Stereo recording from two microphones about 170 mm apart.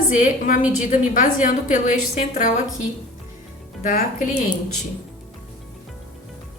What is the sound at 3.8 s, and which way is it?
Speech, 50° left (ahead or behind).